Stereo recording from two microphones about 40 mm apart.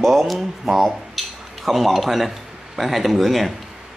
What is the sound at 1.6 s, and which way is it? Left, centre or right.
Speech, centre.